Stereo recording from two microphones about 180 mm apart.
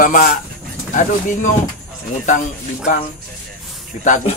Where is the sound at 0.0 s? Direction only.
50° left (ahead or behind).